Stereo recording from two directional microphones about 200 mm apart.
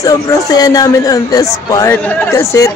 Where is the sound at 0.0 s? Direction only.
15° left (ahead or behind).